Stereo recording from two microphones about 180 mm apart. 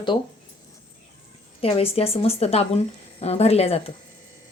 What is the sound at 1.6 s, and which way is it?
A woman's voice, 30° left (ahead or behind).